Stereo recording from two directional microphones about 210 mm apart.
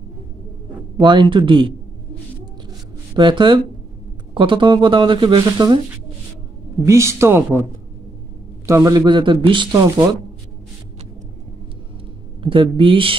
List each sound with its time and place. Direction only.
0.9 s speech: 20° right (ahead or behind)
3.2 s speech: 25° right (ahead or behind)
6.9 s speech: 15° right (ahead or behind)
8.6 s speech: 15° right (ahead or behind)
12.4 s speech: 25° right (ahead or behind)